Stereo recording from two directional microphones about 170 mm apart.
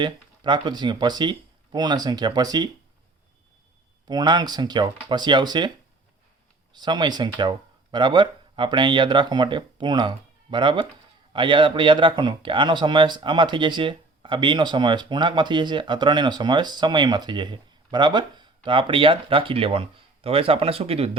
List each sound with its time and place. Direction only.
0.0 s speech: 25° right (ahead or behind)
4.1 s speech: 25° right (ahead or behind)
6.7 s speech: 25° right (ahead or behind)